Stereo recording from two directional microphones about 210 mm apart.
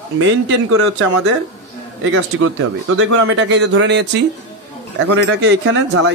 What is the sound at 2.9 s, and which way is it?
Speech, 75° right (ahead or behind).